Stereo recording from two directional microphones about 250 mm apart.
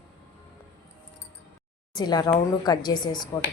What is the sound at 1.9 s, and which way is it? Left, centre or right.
Speech, centre.